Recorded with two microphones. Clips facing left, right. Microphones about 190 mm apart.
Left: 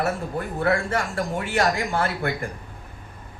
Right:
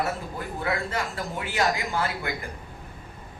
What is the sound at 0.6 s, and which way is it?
A man's voice, 50° left (ahead or behind).